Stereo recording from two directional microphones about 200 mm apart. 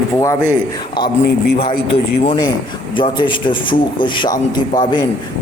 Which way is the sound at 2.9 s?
25° left (ahead or behind).